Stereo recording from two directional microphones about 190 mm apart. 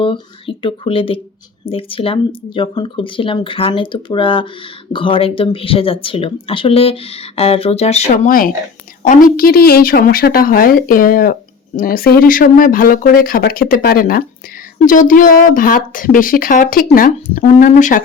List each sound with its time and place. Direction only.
0.0 s speech: 25° left (ahead or behind)